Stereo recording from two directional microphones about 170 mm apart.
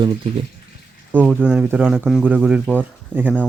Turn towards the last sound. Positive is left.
turn(degrees=-10)  # may be behind; listen again after turning